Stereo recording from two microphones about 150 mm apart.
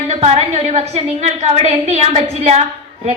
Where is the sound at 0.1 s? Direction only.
45° right (ahead or behind).